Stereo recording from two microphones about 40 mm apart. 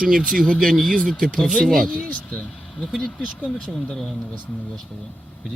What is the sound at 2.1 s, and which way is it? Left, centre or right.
Speech, left.